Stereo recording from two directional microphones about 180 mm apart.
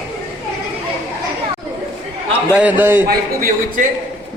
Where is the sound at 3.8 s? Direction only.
45° right (ahead or behind).